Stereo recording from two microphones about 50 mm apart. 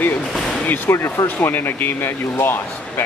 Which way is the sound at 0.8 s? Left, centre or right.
Left.